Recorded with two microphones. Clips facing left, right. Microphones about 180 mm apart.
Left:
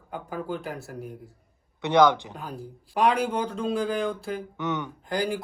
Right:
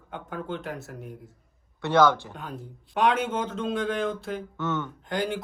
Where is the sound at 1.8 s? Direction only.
15° left (ahead or behind).